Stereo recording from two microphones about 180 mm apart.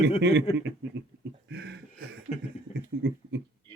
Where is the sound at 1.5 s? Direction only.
60° right (ahead or behind).